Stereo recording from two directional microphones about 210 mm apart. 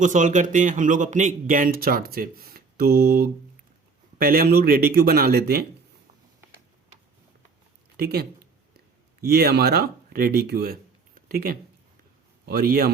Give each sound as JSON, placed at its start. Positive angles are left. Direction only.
{"t": 0.0, "sound": "speech", "side_deg": -35}
{"t": 7.9, "sound": "speech", "side_deg": -50}